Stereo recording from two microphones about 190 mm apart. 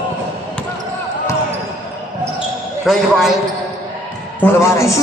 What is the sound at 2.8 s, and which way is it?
Speech, centre (ahead or behind).